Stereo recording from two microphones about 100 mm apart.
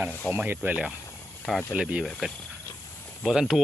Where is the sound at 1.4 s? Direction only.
5° left (ahead or behind).